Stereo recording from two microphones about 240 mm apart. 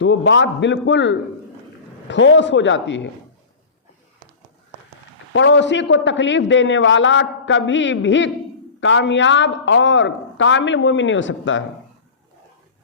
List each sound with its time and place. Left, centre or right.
0.0 s a man's voice: left
5.3 s a man's voice: left